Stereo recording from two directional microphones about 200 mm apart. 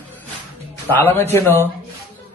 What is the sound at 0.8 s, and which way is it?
Speech, 10° left (ahead or behind).